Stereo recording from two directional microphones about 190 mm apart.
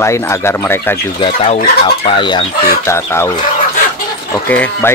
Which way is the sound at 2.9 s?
15° left (ahead or behind).